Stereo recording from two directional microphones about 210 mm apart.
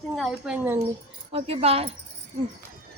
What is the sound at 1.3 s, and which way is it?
Speech, 30° right (ahead or behind).